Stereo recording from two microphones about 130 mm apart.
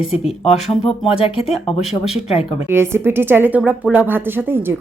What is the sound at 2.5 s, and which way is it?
Speech, 20° right (ahead or behind).